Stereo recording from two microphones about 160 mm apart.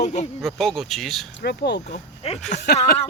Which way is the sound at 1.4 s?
90° left.